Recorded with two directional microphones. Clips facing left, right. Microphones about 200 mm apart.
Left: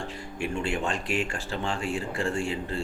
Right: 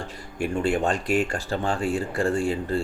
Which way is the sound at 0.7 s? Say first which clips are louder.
Right 6 dB; 40° right (ahead or behind).